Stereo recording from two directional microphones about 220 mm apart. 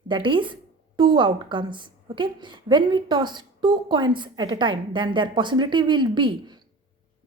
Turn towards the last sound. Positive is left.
turn(degrees=-20)  # may be behind; listen again after turning